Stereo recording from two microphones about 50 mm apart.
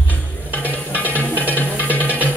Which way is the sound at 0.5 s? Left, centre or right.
Left.